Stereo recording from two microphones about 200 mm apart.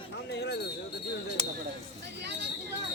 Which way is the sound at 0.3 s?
55° left (ahead or behind).